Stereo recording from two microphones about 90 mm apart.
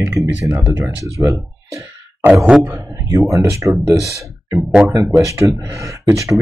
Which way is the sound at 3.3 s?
35° right (ahead or behind).